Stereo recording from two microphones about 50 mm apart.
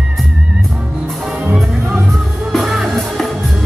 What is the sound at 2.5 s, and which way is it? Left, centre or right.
Music, centre.